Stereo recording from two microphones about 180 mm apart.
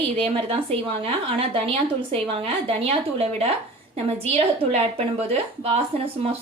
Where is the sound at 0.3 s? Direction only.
30° right (ahead or behind).